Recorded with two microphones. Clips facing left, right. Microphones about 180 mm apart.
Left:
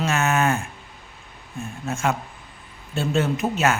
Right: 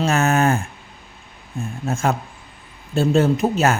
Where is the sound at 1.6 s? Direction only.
35° right (ahead or behind).